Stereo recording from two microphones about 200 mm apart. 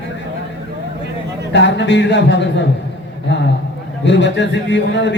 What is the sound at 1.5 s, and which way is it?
A man's voice, 60° left (ahead or behind).